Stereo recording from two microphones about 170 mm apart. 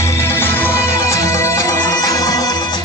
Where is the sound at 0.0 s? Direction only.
15° left (ahead or behind).